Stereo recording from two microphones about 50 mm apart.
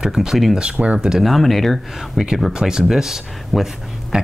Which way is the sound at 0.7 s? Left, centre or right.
Right.